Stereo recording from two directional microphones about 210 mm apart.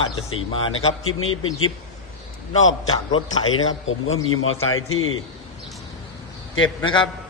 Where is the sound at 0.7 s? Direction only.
80° left.